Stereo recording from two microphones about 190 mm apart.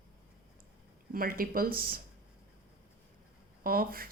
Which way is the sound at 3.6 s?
50° right (ahead or behind).